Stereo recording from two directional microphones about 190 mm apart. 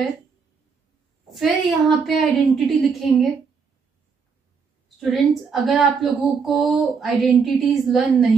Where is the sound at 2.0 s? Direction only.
Centre (ahead or behind).